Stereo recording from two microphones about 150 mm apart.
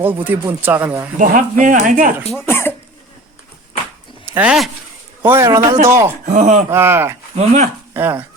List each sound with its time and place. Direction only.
0.0 s speech: 10° right (ahead or behind)
1.2 s speech: 60° right (ahead or behind)
2.5 s cough: 15° left (ahead or behind)
4.3 s speech: 10° right (ahead or behind)
5.2 s a man's voice: 15° right (ahead or behind)
6.2 s speech: 50° right (ahead or behind)
6.7 s speech: 15° right (ahead or behind)
7.3 s speech: 45° right (ahead or behind)
7.9 s speech: 15° right (ahead or behind)